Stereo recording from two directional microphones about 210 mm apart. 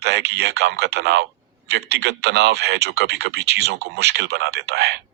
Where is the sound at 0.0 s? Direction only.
50° right (ahead or behind).